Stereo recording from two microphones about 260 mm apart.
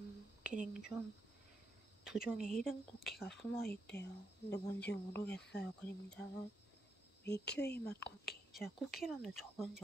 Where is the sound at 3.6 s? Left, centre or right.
Left.